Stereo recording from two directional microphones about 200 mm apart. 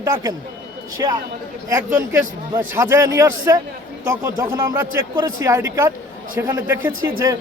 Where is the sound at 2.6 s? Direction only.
15° right (ahead or behind).